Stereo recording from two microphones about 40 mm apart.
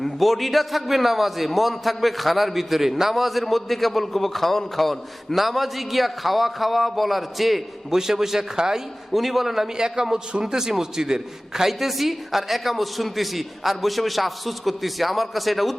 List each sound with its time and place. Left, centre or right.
0.0 s a man's voice: centre
9.1 s a man's voice: centre
9.7 s a man's voice: centre